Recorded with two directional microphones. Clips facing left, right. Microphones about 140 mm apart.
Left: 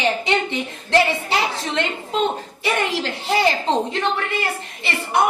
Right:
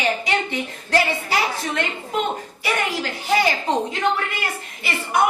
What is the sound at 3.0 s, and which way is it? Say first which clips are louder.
Speech: even; 25° left (ahead or behind).